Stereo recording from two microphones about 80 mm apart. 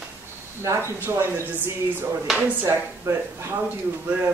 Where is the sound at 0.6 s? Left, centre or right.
Right.